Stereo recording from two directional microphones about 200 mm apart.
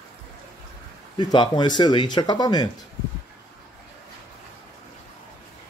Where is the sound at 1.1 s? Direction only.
25° left (ahead or behind).